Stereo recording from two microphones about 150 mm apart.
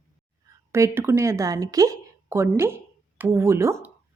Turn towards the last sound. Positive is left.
turn(degrees=-20)  # may be behind; listen again after turning